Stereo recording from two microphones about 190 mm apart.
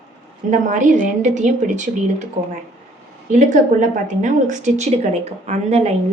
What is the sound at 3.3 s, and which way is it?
Speech, 40° right (ahead or behind).